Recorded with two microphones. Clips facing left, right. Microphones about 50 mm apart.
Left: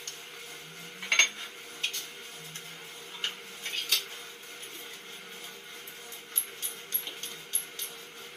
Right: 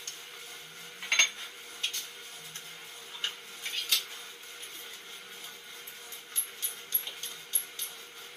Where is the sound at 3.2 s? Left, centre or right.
Left.